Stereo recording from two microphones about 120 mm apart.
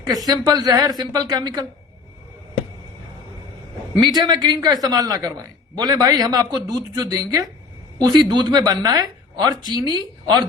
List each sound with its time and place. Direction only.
0.1 s a man's voice: 30° right (ahead or behind)
4.0 s a man's voice: 35° right (ahead or behind)